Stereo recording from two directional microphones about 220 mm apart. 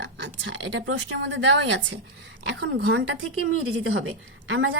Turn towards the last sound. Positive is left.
turn(degrees=-70)  # may be behind; listen again after turning